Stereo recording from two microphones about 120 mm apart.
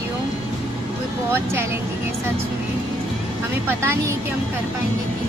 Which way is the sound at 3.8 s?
20° right (ahead or behind).